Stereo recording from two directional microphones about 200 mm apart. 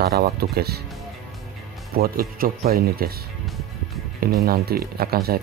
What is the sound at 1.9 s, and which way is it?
Speech, 50° right (ahead or behind).